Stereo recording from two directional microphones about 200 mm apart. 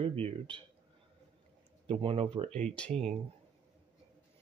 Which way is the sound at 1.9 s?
25° right (ahead or behind).